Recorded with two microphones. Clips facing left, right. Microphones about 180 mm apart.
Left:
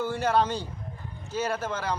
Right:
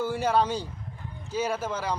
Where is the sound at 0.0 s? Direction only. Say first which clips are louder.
Even; 5° right (ahead or behind).